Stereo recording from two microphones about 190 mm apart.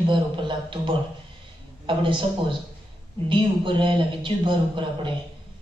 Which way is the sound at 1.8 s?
25° right (ahead or behind).